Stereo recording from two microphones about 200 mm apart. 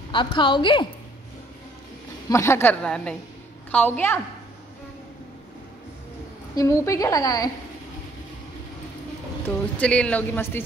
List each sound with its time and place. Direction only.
0.1 s a woman's voice: 25° left (ahead or behind)
2.2 s a woman's voice: 15° left (ahead or behind)
6.5 s a woman's voice: 15° left (ahead or behind)
9.8 s a woman's voice: 5° left (ahead or behind)